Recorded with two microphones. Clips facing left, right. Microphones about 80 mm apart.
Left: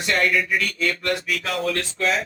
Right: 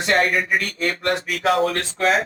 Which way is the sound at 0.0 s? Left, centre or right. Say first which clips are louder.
Right 2 dB; right.